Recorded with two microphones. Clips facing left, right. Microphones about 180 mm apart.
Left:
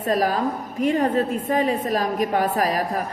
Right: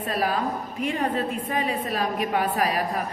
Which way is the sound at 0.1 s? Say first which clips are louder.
Left 5 dB; 40° left (ahead or behind).